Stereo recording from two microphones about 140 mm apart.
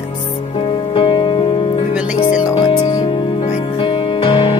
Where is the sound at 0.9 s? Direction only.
35° left (ahead or behind).